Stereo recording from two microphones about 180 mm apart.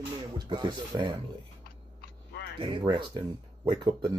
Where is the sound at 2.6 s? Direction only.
25° right (ahead or behind).